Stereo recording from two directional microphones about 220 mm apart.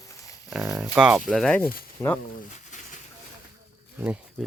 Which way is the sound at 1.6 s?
40° left (ahead or behind).